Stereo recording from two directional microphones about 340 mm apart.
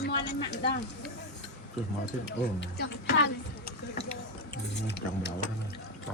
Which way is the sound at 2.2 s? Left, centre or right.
Left.